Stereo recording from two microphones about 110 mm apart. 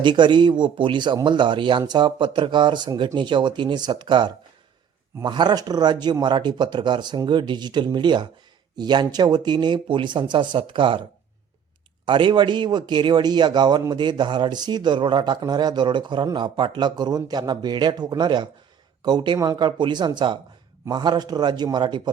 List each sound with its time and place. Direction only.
0.0 s speech: 45° right (ahead or behind)
12.0 s a man's voice: 45° right (ahead or behind)